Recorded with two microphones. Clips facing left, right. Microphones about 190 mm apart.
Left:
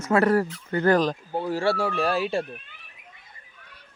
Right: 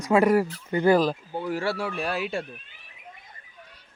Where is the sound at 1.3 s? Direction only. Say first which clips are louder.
Left 3 dB; 30° left (ahead or behind).